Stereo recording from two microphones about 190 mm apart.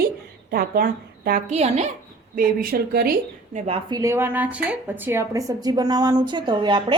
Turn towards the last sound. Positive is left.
turn(degrees=-25)  # may be behind; listen again after turning